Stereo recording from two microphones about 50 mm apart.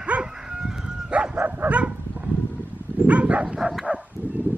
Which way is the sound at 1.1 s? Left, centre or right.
Centre.